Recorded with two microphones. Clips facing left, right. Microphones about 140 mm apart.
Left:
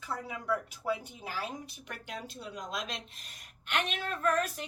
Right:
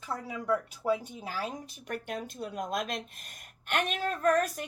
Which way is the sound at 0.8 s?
40° right (ahead or behind).